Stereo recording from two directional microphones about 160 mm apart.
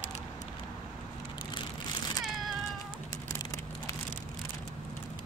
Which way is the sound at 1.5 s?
25° left (ahead or behind).